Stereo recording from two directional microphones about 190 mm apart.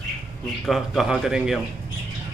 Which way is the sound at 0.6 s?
Centre (ahead or behind).